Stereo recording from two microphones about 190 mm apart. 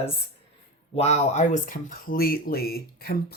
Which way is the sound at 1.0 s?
35° left (ahead or behind).